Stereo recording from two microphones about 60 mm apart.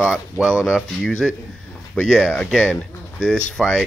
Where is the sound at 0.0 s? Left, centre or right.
Centre.